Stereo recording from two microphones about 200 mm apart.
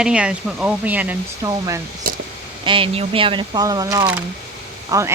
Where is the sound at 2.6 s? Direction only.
25° right (ahead or behind).